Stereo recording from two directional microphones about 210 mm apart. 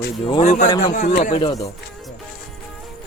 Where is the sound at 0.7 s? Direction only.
20° left (ahead or behind).